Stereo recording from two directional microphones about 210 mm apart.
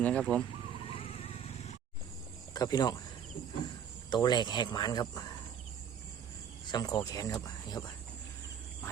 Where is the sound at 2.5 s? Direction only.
20° left (ahead or behind).